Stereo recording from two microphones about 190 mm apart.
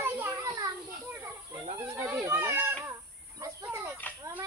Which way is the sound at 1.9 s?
10° right (ahead or behind).